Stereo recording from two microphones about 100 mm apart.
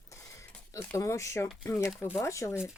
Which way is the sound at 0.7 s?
30° left (ahead or behind).